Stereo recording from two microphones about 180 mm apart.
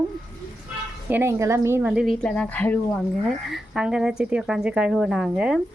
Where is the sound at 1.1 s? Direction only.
15° right (ahead or behind); by 2.8 s 10° left (ahead or behind).